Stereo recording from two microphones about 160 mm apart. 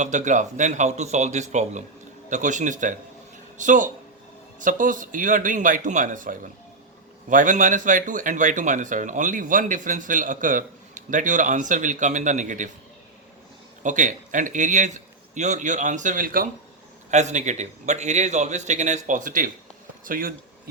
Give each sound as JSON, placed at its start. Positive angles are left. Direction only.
{"t": 0.0, "sound": "speech", "side_deg": -50}
{"t": 13.8, "sound": "speech", "side_deg": -50}
{"t": 17.1, "sound": "speech", "side_deg": -45}